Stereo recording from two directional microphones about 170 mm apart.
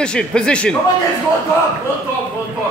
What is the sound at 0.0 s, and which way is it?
Speech, 5° left (ahead or behind).